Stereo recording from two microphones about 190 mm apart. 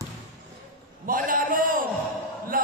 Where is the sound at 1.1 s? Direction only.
45° right (ahead or behind).